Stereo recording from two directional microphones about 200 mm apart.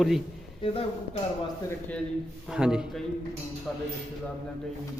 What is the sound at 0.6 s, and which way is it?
Speech, 30° left (ahead or behind).